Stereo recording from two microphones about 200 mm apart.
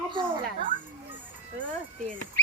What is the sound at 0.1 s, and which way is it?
Music, 25° right (ahead or behind).